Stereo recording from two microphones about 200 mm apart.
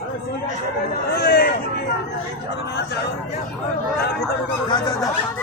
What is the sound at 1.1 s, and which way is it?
Speech, 50° left (ahead or behind).